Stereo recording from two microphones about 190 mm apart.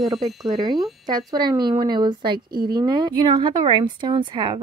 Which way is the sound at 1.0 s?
20° right (ahead or behind).